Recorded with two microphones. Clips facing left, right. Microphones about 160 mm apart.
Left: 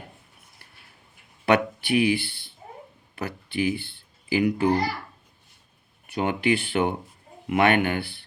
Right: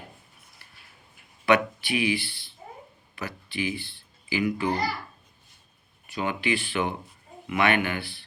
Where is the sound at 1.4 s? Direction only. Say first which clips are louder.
Left 1 dB; 55° left (ahead or behind).